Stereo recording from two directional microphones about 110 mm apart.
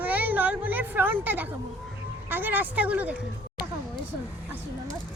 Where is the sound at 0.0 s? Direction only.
15° right (ahead or behind).